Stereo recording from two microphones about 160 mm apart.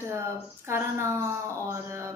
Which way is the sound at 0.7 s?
15° right (ahead or behind).